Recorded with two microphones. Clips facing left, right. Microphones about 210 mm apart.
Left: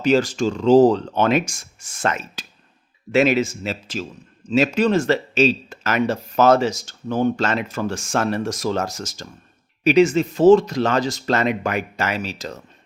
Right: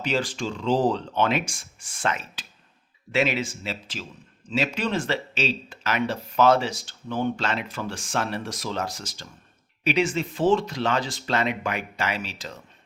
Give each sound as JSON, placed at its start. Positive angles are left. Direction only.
{"t": 0.0, "sound": "speech", "side_deg": 45}